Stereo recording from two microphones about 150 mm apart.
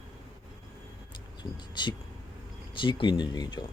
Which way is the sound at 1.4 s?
30° left (ahead or behind).